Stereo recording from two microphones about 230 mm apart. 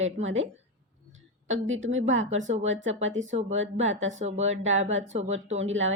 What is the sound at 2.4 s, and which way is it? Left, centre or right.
Speech, right.